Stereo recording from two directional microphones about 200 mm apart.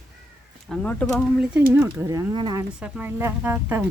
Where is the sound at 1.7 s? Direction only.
15° right (ahead or behind).